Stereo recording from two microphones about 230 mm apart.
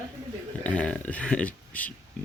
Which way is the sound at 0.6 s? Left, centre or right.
Centre.